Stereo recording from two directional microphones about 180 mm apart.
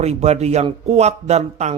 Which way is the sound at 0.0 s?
35° right (ahead or behind).